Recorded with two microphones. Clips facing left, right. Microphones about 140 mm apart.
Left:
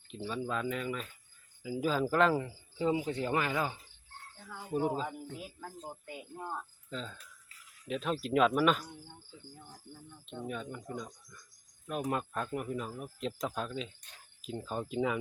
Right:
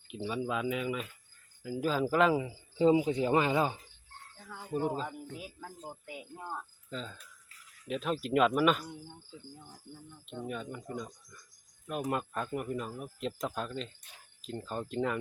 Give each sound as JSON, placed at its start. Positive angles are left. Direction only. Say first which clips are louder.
{"t": 0.1, "sound": "speech", "louder": "right 2 dB", "side_deg": -10}
{"t": 2.7, "sound": "speech", "louder": "right 6 dB", "side_deg": -20}
{"t": 4.4, "sound": "speech", "louder": "left 1 dB", "side_deg": 0}
{"t": 10.2, "sound": "speech", "louder": "right 1 dB", "side_deg": 0}